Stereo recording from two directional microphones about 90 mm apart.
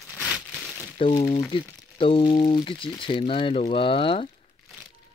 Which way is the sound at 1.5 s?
75° left (ahead or behind).